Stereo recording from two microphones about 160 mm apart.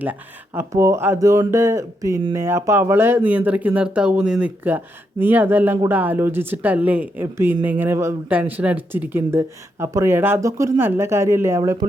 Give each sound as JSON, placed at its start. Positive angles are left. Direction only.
{"t": 0.0, "sound": "speech", "side_deg": -10}